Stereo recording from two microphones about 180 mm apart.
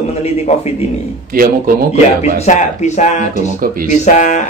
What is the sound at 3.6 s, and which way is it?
Speech, 55° right (ahead or behind).